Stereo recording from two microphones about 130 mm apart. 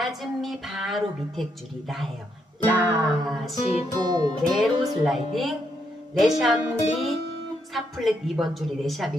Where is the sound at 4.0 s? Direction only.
35° right (ahead or behind).